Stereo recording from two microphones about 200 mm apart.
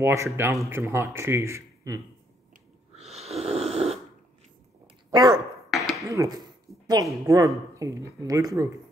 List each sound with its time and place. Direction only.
0.0 s speech: 15° right (ahead or behind)
3.0 s snoring: 30° right (ahead or behind)
5.1 s speech: 20° right (ahead or behind)
5.7 s a sound: centre (ahead or behind)
6.0 s speech: 15° right (ahead or behind)